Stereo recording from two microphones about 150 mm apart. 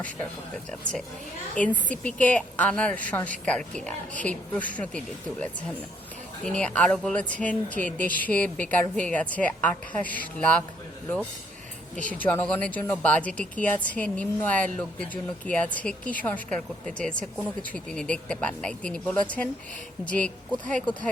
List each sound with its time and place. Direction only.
0.7 s speech: 5° left (ahead or behind)
11.9 s speech: 10° left (ahead or behind)